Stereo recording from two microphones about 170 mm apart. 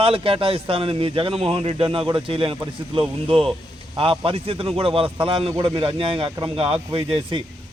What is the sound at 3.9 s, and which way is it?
A man's voice, 30° right (ahead or behind).